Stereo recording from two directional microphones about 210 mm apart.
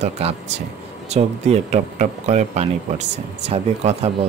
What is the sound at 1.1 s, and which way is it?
Speech, 30° right (ahead or behind).